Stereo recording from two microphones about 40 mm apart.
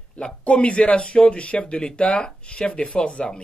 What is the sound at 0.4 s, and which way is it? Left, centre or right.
A woman's voice, left.